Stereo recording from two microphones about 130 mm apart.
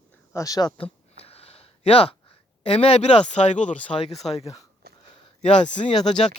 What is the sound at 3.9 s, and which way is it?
Speech, 50° left (ahead or behind).